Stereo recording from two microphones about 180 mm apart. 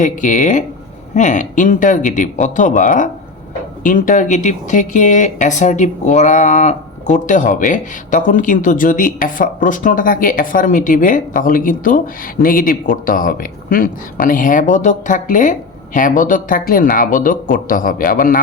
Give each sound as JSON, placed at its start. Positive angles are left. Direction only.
{"t": 0.0, "sound": "speech", "side_deg": 45}